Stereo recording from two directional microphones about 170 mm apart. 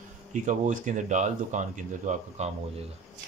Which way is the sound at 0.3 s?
45° right (ahead or behind).